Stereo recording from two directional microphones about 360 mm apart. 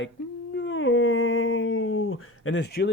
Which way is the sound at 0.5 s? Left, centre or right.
Left.